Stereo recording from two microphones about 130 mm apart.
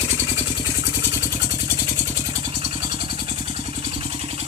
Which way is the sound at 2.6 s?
40° right (ahead or behind).